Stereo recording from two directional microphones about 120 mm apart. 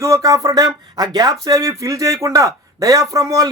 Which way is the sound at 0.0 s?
25° right (ahead or behind).